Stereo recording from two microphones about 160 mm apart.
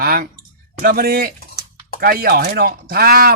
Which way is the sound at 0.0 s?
65° right (ahead or behind).